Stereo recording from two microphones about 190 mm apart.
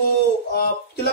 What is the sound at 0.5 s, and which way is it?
Speech, 55° left (ahead or behind).